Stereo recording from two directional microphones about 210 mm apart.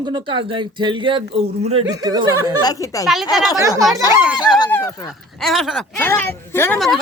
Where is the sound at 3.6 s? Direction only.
15° right (ahead or behind).